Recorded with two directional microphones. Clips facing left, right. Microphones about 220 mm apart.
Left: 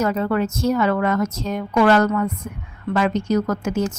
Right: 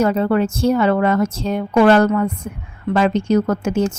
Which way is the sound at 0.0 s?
30° right (ahead or behind).